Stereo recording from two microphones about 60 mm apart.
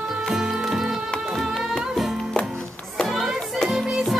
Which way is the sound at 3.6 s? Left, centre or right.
Centre.